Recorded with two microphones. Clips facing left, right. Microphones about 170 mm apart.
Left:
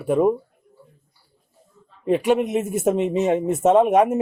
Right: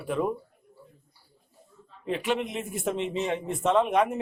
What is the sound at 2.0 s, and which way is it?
A man's voice, 45° left (ahead or behind).